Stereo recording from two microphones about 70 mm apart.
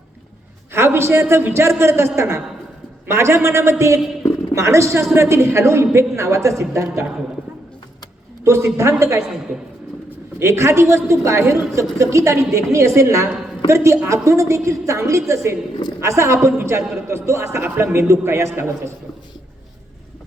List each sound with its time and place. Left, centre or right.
0.7 s a man's voice: right
8.4 s a woman's voice: right
10.4 s a woman's voice: right